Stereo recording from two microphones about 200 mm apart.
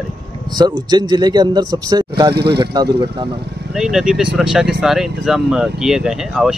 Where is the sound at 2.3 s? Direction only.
55° right (ahead or behind).